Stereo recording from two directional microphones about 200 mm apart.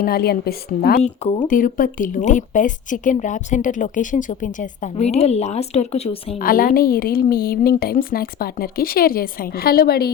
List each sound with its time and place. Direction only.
0.0 s a woman's voice: 50° left (ahead or behind)
1.0 s speech: 35° left (ahead or behind)
6.4 s a woman's voice: 45° left (ahead or behind)